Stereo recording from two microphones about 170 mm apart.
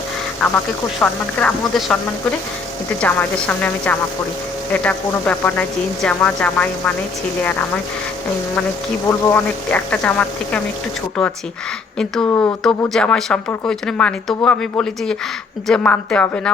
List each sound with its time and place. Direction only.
1.0 s speech: 10° left (ahead or behind)
3.0 s speech: 10° left (ahead or behind)
9.0 s speech: 10° left (ahead or behind)
11.9 s speech: 5° left (ahead or behind)
12.3 s speech: 15° left (ahead or behind)
12.9 s speech: 5° left (ahead or behind)